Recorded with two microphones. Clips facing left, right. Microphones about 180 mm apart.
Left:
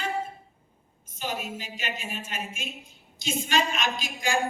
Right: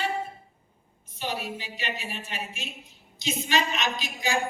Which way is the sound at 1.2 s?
45° left (ahead or behind).